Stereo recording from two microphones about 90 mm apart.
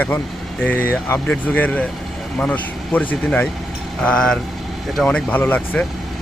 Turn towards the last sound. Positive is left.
turn(degrees=5)  # may be behind; listen again after turning